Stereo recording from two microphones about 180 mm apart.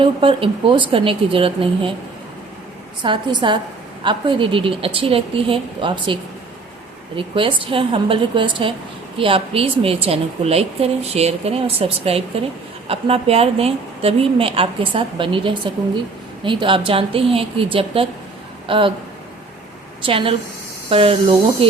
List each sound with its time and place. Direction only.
0.0 s speech: 30° right (ahead or behind)
3.0 s a woman's voice: 25° right (ahead or behind)
7.2 s a woman's voice: 30° right (ahead or behind)
20.1 s a woman's voice: 30° right (ahead or behind)